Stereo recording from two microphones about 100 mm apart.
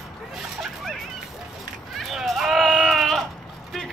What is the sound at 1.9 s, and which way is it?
Sheep, centre (ahead or behind).